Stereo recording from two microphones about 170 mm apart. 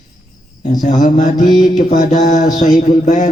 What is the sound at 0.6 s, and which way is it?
A man's voice, 45° left (ahead or behind).